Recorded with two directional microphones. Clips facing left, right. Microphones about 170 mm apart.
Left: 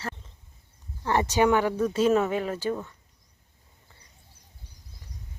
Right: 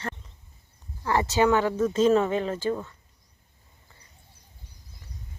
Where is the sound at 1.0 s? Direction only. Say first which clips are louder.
Even; 20° left (ahead or behind).